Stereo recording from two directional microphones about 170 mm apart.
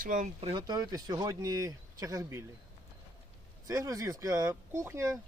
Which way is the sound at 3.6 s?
20° right (ahead or behind).